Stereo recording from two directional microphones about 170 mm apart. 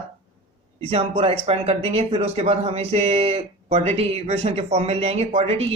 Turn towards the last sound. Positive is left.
turn(degrees=-35)  # may be behind; listen again after turning